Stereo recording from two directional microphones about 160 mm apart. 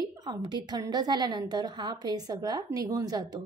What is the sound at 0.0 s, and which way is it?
A woman's voice, 25° right (ahead or behind).